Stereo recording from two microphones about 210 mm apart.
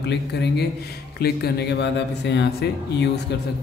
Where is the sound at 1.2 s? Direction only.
50° left (ahead or behind).